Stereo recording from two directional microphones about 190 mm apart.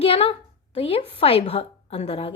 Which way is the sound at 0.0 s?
30° left (ahead or behind).